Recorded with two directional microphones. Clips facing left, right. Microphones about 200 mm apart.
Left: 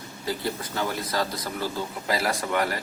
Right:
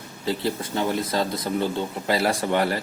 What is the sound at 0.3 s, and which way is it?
Speech, 25° right (ahead or behind).